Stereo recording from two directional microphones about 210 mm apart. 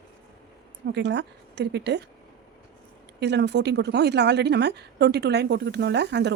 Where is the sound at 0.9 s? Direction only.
55° right (ahead or behind).